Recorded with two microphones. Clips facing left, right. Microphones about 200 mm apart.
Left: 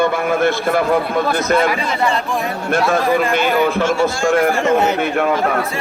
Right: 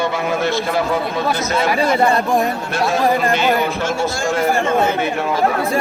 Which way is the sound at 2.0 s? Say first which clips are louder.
Right 3 dB; 40° right (ahead or behind).